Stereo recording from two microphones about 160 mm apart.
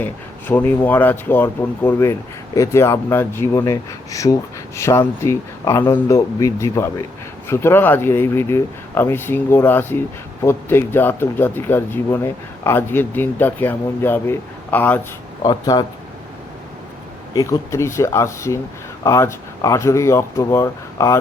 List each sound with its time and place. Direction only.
0.0 s speech: 10° left (ahead or behind)
15.4 s speech: 25° left (ahead or behind)
17.3 s speech: 20° left (ahead or behind)